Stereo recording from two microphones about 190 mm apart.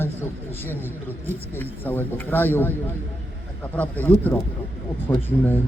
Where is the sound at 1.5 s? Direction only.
10° left (ahead or behind).